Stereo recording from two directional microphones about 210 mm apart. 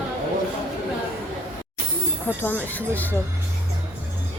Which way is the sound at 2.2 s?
10° left (ahead or behind).